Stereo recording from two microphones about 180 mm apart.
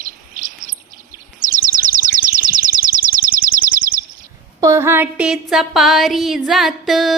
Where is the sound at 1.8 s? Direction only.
50° right (ahead or behind).